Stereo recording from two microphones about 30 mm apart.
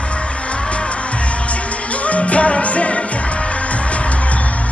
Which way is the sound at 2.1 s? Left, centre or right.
Left.